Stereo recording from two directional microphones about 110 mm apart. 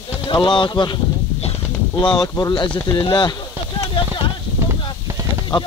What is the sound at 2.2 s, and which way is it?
Speech, 40° left (ahead or behind).